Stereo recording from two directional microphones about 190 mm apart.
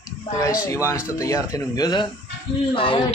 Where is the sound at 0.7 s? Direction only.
15° left (ahead or behind).